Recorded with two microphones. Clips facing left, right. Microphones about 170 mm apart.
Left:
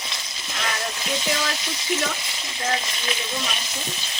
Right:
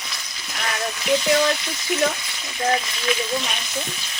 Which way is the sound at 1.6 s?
20° left (ahead or behind).